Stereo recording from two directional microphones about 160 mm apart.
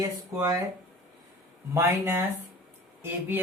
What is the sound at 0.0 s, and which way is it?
Speech, 20° right (ahead or behind).